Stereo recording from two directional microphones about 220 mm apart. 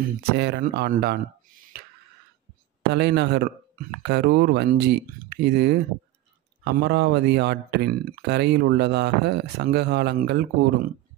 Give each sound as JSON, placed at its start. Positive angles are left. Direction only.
{"t": 0.4, "sound": "speech", "side_deg": -45}
{"t": 2.8, "sound": "speech", "side_deg": -50}